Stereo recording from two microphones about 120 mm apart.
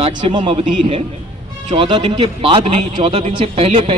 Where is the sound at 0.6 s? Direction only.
55° right (ahead or behind).